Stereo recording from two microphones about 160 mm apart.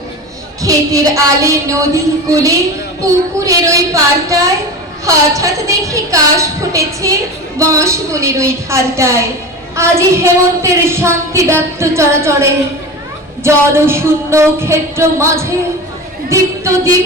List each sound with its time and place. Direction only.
0.6 s a woman's voice: 20° right (ahead or behind)